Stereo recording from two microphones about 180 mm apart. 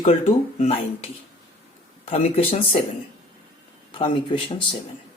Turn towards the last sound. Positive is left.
turn(degrees=25)  # may be behind; listen again after turning